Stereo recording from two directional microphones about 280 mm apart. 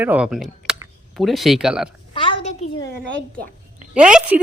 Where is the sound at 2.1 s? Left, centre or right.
Centre.